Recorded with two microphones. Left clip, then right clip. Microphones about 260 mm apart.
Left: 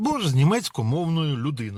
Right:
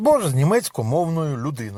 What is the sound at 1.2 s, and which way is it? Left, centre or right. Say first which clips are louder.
Speech: right 2 dB; right.